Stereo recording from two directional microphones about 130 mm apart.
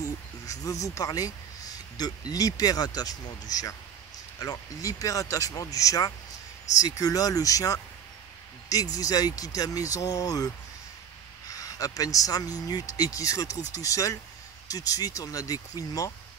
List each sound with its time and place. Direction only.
0.5 s speech: 25° left (ahead or behind)